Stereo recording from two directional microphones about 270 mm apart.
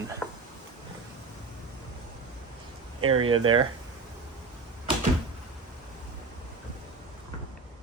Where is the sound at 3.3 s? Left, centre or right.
Centre.